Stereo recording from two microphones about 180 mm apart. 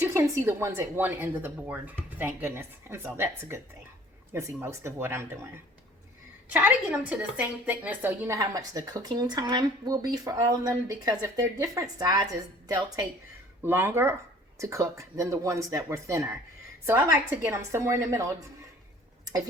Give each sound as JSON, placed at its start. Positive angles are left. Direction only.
{"t": 0.0, "sound": "speech", "side_deg": -15}
{"t": 6.5, "sound": "a woman's voice", "side_deg": -10}